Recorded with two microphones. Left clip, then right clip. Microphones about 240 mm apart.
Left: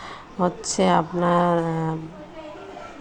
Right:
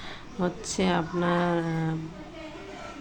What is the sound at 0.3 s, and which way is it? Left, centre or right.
A woman's voice, centre.